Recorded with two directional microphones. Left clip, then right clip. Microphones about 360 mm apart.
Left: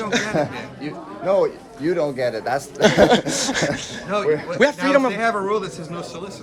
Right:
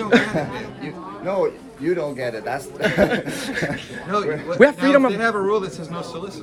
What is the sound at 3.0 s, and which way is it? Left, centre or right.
Speech, centre.